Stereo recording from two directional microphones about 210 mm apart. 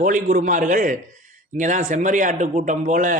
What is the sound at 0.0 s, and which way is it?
A man's voice, 40° right (ahead or behind).